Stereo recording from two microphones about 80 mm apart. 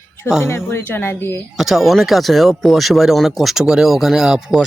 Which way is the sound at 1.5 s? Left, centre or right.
Centre.